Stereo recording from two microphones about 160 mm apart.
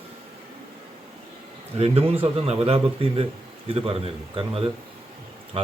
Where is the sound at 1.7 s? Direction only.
40° right (ahead or behind).